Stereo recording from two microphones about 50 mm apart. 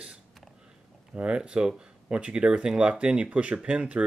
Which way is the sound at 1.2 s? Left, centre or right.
Right.